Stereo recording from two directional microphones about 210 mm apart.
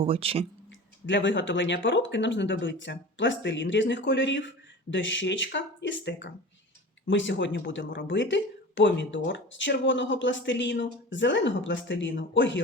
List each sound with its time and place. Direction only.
0.0 s speech: 25° right (ahead or behind)
1.0 s speech: 60° left (ahead or behind)